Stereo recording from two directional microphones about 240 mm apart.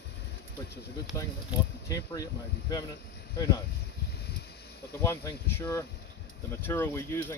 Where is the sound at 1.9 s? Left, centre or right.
Centre.